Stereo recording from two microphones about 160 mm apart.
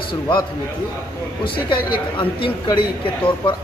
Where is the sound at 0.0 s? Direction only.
30° left (ahead or behind).